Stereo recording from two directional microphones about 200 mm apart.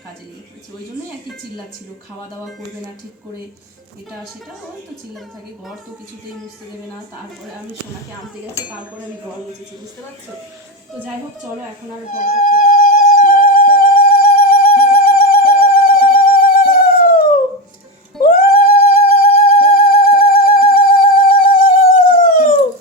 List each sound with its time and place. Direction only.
12.2 s music: 45° left (ahead or behind)